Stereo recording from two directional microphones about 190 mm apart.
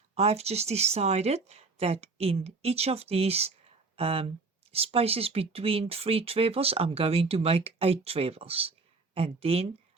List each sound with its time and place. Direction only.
0.1 s speech: 35° right (ahead or behind)